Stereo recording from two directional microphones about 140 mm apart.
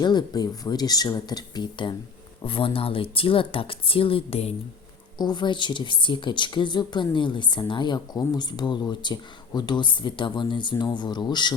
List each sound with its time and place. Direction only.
0.0 s speech: 30° left (ahead or behind)
5.1 s speech: 30° left (ahead or behind)